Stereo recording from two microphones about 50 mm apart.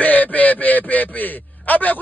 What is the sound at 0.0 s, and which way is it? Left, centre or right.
A man's voice, left.